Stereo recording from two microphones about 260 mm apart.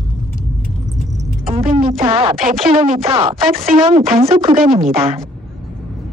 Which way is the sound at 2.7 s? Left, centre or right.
Right.